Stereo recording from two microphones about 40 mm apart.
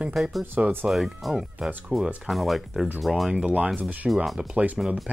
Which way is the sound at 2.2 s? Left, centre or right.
Centre.